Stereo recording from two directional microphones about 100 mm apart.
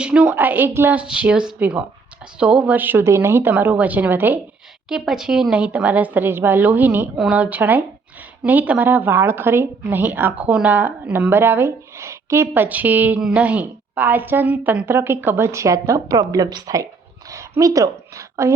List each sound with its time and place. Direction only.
0.0 s a woman's voice: 10° right (ahead or behind)
1.0 s a woman's voice: 10° right (ahead or behind)
4.9 s a woman's voice: 5° right (ahead or behind); by 16.8 s 40° right (ahead or behind)
17.2 s a sound: 30° right (ahead or behind)